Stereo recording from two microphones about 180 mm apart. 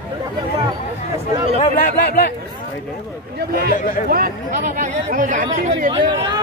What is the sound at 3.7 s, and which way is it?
Speech, 50° left (ahead or behind).